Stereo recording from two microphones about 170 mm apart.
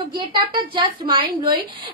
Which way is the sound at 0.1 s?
25° right (ahead or behind).